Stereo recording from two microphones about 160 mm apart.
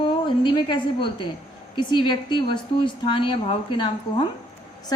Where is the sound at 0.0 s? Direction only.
30° left (ahead or behind).